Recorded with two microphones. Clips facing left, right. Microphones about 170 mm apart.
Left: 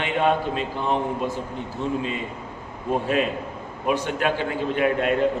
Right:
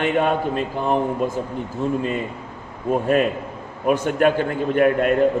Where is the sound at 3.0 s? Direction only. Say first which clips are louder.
Right 4 dB; 50° right (ahead or behind).